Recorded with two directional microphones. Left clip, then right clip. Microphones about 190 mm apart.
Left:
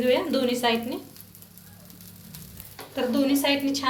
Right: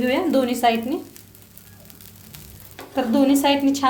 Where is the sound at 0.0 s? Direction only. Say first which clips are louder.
Right 3 dB; 40° right (ahead or behind).